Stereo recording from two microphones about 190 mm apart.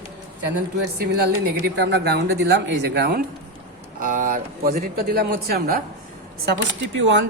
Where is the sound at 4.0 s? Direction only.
45° right (ahead or behind).